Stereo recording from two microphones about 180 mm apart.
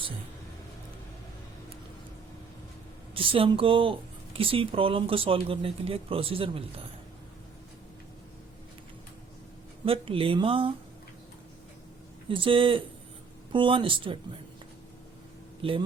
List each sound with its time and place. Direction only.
3.2 s speech: 30° right (ahead or behind)
9.8 s speech: 30° right (ahead or behind)
12.3 s speech: 30° right (ahead or behind)
15.6 s speech: 30° right (ahead or behind)